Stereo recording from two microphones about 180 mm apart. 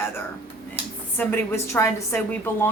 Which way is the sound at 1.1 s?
10° left (ahead or behind).